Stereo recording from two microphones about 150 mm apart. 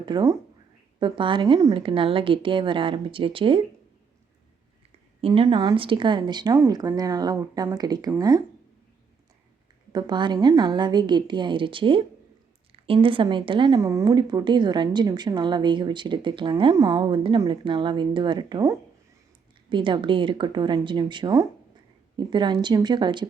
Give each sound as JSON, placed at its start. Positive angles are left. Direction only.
{"t": 0.0, "sound": "a woman's voice", "side_deg": -25}
{"t": 5.2, "sound": "a woman's voice", "side_deg": -35}
{"t": 9.9, "sound": "a woman's voice", "side_deg": -30}